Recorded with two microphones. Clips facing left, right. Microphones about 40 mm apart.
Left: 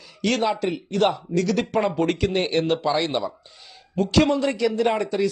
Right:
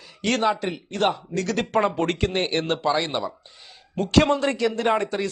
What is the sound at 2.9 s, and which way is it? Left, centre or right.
Speech, centre.